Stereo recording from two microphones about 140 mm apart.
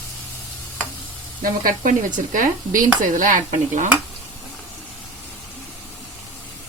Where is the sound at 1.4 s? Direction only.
80° right; by 3.9 s 60° right (ahead or behind).